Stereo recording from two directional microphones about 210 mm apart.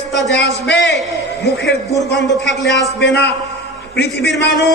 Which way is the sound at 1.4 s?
55° left (ahead or behind).